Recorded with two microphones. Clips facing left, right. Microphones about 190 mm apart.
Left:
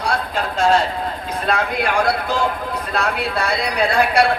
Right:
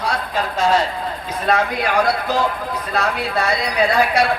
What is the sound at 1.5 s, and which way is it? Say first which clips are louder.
Speech: right 1 dB; 55° left (ahead or behind).